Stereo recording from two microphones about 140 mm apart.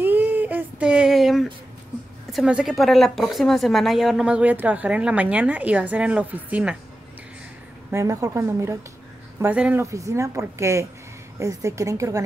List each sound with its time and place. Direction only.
0.0 s child singing: 15° right (ahead or behind)
2.3 s a woman's voice: 5° right (ahead or behind)
7.9 s a woman's voice: 20° right (ahead or behind)
9.8 s a woman's voice: 20° right (ahead or behind)